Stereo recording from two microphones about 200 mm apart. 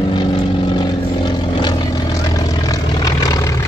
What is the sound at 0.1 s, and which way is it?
Vehicle, 20° left (ahead or behind).